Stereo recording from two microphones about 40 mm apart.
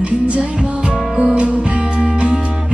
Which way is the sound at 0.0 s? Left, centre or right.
Right.